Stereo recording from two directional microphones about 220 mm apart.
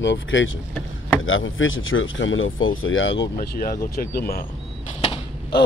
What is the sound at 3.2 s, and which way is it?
Speech, 45° left (ahead or behind).